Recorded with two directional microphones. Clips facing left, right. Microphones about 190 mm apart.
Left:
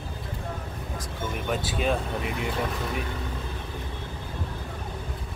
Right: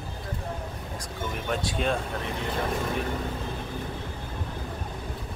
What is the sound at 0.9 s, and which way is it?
Speech, centre (ahead or behind).